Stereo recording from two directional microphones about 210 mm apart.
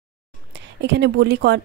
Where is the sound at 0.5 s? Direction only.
55° right (ahead or behind).